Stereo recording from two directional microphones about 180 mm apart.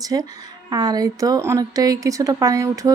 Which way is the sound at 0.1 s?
20° right (ahead or behind).